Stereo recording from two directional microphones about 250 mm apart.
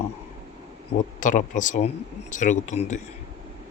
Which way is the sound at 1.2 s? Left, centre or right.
Left.